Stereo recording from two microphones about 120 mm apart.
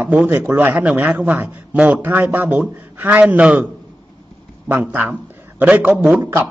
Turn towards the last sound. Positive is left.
turn(degrees=-15)  # may be behind; listen again after turning